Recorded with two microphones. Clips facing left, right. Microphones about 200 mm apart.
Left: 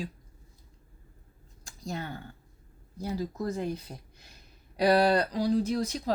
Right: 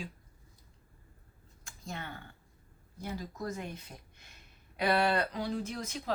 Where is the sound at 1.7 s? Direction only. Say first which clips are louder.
Left 6 dB; 35° left (ahead or behind).